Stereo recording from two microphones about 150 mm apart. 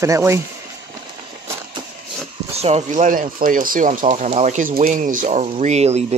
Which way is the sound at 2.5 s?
45° right (ahead or behind).